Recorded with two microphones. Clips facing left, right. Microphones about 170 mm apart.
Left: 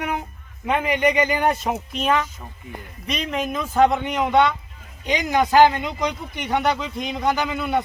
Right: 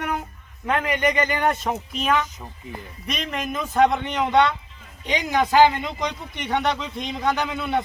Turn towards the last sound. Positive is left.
turn(degrees=0)  # may be behind; listen again after turning